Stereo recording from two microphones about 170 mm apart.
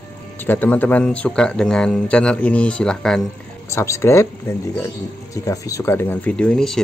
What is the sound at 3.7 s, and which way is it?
Speech, 15° left (ahead or behind).